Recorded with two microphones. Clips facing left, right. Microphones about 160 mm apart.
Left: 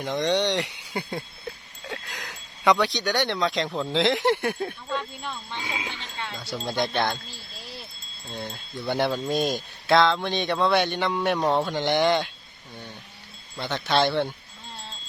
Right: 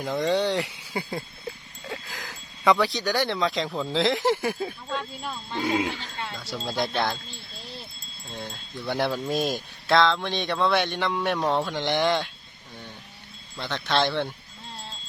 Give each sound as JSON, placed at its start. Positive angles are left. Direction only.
{"t": 0.0, "sound": "speech", "side_deg": -5}
{"t": 5.6, "sound": "speech", "side_deg": -60}
{"t": 6.0, "sound": "speech", "side_deg": 0}
{"t": 13.6, "sound": "speech", "side_deg": 5}